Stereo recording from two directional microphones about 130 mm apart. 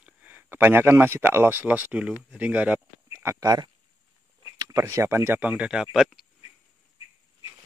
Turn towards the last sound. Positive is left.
turn(degrees=0)  # may be behind; listen again after turning